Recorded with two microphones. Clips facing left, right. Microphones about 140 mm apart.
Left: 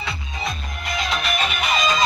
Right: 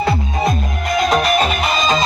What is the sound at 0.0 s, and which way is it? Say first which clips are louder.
Music: right 12 dB; 50° right (ahead or behind).